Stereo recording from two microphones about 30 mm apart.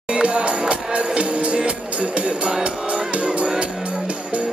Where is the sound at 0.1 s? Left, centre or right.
Right.